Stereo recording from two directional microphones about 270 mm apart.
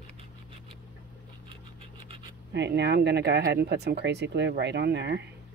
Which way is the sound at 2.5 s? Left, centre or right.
Right.